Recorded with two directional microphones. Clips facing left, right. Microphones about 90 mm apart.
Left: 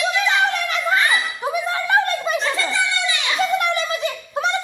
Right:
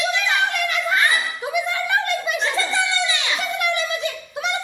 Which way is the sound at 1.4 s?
35° left (ahead or behind).